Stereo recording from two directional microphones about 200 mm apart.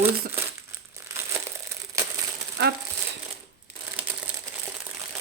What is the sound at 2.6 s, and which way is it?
Crumpling, 60° right (ahead or behind).